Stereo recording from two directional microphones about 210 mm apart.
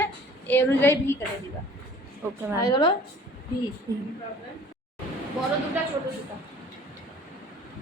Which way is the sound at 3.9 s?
15° right (ahead or behind).